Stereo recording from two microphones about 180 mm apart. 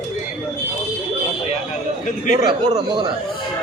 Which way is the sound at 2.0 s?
45° left (ahead or behind).